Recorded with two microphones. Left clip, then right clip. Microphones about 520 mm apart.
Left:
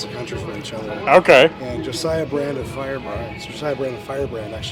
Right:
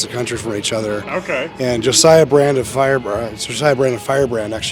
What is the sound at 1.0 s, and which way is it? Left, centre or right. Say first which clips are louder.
Speech: left 10 dB; left.